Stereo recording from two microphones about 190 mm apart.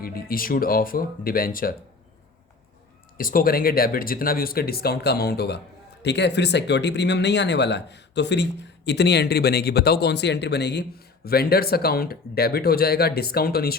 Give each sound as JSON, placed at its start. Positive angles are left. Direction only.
{"t": 0.0, "sound": "speech", "side_deg": 50}
{"t": 3.2, "sound": "speech", "side_deg": 45}